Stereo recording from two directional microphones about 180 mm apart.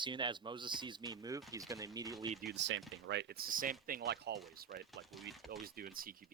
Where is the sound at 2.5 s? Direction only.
85° right.